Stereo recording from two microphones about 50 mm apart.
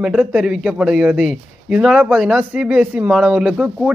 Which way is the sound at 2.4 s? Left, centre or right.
Right.